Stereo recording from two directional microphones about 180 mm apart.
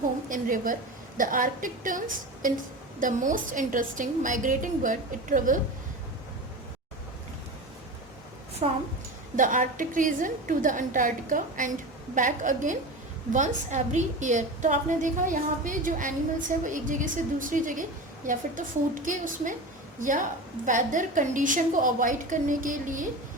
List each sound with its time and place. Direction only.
0.3 s a woman's voice: 50° right (ahead or behind)
8.6 s a woman's voice: 30° right (ahead or behind)
9.3 s a woman's voice: 45° right (ahead or behind)